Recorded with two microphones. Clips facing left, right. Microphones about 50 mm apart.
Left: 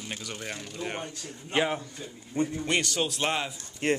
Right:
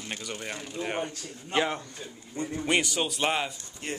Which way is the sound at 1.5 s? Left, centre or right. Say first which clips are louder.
Even; centre.